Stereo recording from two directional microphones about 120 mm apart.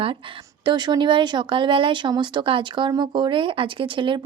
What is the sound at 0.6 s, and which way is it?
Speech, 40° right (ahead or behind).